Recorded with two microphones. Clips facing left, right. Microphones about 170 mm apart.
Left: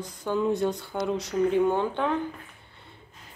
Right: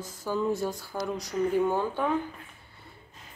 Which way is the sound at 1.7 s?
5° right (ahead or behind).